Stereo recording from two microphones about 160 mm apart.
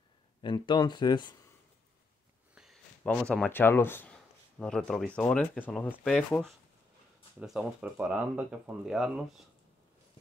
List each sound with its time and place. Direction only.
0.4 s speech: 30° left (ahead or behind)
2.5 s a sound: centre (ahead or behind)
3.0 s speech: 5° left (ahead or behind)